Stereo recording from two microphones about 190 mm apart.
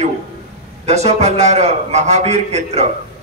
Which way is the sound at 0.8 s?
35° right (ahead or behind).